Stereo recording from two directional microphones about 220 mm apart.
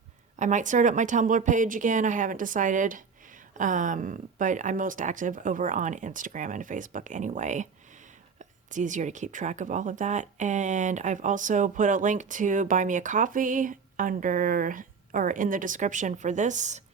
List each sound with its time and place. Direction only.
0.3 s speech: 35° right (ahead or behind)